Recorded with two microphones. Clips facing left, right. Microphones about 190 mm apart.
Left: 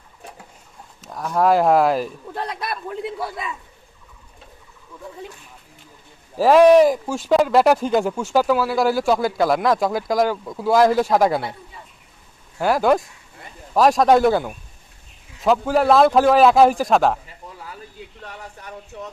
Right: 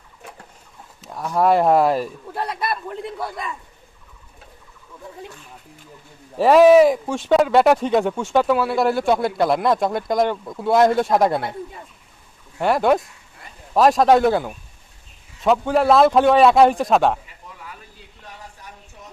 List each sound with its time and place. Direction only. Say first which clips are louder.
1.0 s speech: even; centre (ahead or behind)
6.3 s speech: even; centre (ahead or behind)
12.5 s speech: even; centre (ahead or behind)